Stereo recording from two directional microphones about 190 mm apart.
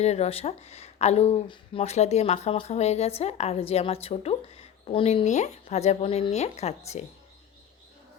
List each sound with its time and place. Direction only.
0.0 s speech: 35° left (ahead or behind)